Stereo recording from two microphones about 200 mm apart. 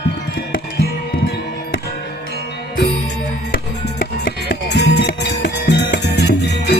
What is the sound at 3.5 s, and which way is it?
Music, 50° left (ahead or behind).